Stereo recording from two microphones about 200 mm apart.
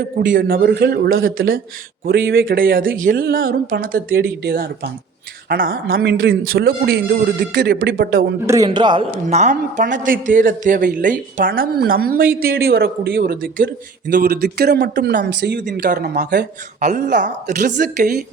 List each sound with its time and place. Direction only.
0.0 s speech: 45° right (ahead or behind)
8.4 s a man's voice: 20° right (ahead or behind)
9.2 s speech: 35° right (ahead or behind)
15.2 s speech: 60° right (ahead or behind)
15.6 s speech: 45° right (ahead or behind)
16.8 s speech: 40° right (ahead or behind)